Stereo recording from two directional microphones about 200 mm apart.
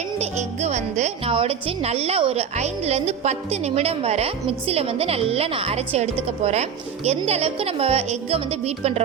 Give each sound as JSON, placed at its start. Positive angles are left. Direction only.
{"t": 0.2, "sound": "speech", "side_deg": -35}